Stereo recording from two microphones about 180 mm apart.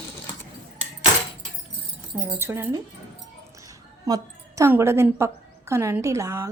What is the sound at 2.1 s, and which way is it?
A woman's voice, 15° right (ahead or behind).